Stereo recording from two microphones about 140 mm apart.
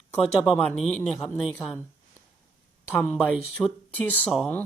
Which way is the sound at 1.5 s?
15° left (ahead or behind).